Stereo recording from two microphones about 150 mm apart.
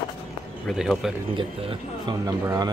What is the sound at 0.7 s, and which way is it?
Speech, centre (ahead or behind).